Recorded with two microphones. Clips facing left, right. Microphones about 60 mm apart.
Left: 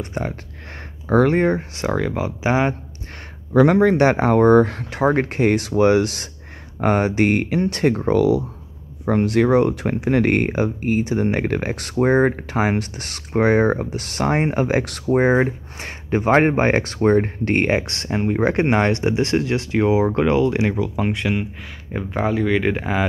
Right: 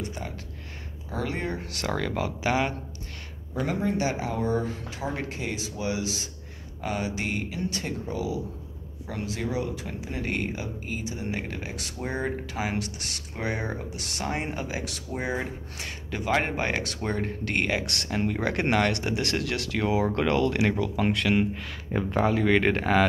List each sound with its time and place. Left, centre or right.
0.0 s speech: left
1.6 s speech: left
3.5 s speech: left
9.0 s speech: left; by 23.0 s centre